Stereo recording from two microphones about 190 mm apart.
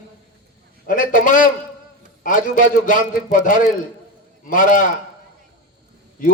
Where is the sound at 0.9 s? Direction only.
45° left (ahead or behind).